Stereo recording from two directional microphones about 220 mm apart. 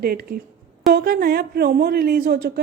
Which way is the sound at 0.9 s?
45° right (ahead or behind).